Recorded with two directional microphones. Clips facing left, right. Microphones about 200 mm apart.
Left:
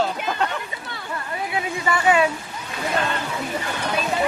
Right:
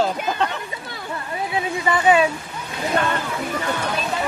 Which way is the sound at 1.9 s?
20° right (ahead or behind).